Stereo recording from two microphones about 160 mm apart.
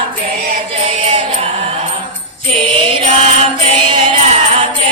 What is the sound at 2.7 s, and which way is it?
Music, 35° right (ahead or behind).